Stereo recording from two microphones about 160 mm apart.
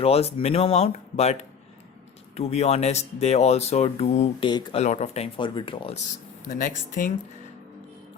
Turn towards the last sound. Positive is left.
turn(degrees=55)  # may be behind; listen again after turning